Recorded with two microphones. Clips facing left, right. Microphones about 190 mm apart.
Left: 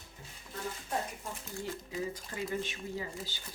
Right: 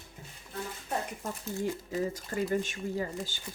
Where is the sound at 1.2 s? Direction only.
45° right (ahead or behind).